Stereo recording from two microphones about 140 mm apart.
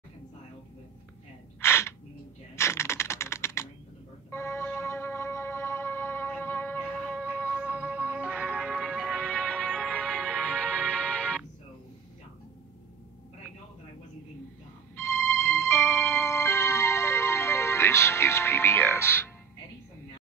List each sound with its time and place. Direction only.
1.6 s gasp: 20° left (ahead or behind)
2.5 s typing: 20° left (ahead or behind)
4.3 s a sound: 20° left (ahead or behind)
4.7 s music: 20° left (ahead or behind)
7.5 s music: 10° right (ahead or behind); by 11.4 s 5° left (ahead or behind)
15.0 s music: 15° left (ahead or behind)